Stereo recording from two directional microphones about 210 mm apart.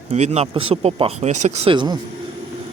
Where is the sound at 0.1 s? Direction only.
30° right (ahead or behind).